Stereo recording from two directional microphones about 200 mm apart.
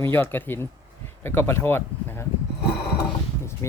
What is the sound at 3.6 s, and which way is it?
Speech, 15° left (ahead or behind).